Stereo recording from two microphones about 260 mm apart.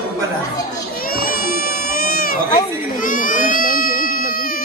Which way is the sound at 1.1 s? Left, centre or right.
Left.